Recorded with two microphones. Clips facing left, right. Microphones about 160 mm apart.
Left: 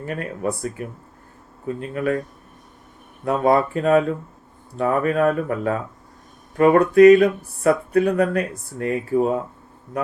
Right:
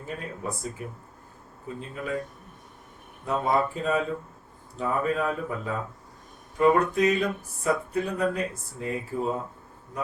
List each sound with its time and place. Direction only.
0.0 s speech: 70° left (ahead or behind)
3.2 s speech: 65° left (ahead or behind)